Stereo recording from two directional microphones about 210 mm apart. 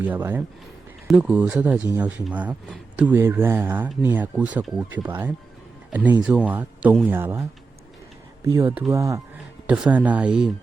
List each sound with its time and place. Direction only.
0.0 s speech: 10° right (ahead or behind)
8.5 s speech: 10° right (ahead or behind)
9.6 s speech: 5° right (ahead or behind)